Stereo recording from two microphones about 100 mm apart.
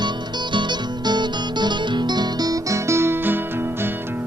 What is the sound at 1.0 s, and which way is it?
Music, 45° right (ahead or behind).